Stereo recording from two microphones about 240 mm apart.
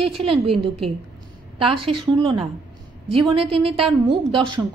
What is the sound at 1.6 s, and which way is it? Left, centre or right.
A woman's voice, right.